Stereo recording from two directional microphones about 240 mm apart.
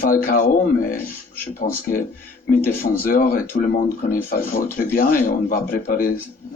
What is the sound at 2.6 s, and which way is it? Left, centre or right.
Speech, left.